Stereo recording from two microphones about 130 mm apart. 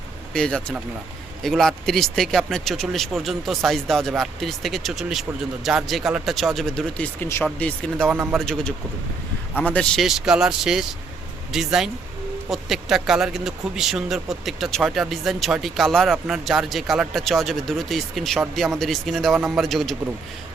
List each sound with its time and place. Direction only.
0.3 s speech: 5° left (ahead or behind)
8.1 s a man's voice: 15° right (ahead or behind)
8.4 s speech: 5° left (ahead or behind)
10.0 s speech: 5° right (ahead or behind)